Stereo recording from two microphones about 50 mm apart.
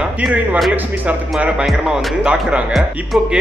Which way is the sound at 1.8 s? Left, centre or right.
Centre.